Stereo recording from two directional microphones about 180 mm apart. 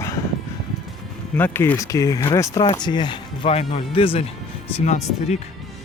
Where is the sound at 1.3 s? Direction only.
10° left (ahead or behind).